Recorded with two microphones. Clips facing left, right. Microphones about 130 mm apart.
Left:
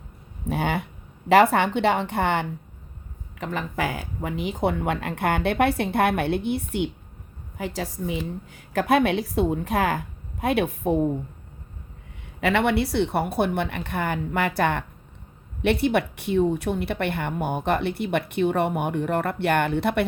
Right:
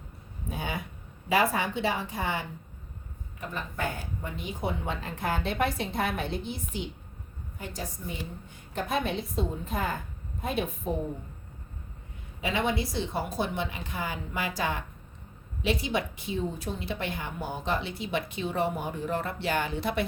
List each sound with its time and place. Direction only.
0.4 s a woman's voice: 70° left (ahead or behind)
3.4 s a woman's voice: 90° left; by 6.9 s 65° left (ahead or behind)
7.6 s a woman's voice: 90° left
8.7 s a woman's voice: 75° left (ahead or behind)
12.4 s a woman's voice: 70° left (ahead or behind)